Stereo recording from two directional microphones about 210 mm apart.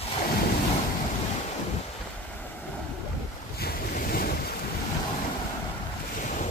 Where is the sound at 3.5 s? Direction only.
45° left (ahead or behind).